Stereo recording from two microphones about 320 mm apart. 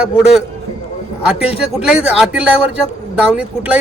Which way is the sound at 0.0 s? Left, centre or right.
Centre.